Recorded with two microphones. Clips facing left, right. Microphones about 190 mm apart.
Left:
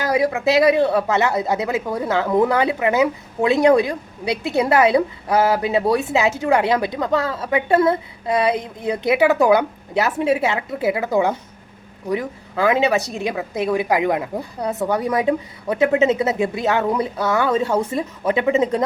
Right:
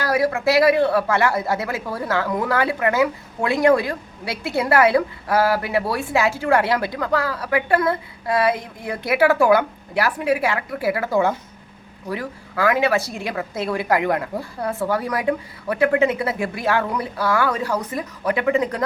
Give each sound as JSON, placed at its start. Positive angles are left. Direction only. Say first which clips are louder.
{"t": 0.0, "sound": "speech", "louder": "left 1 dB", "side_deg": 20}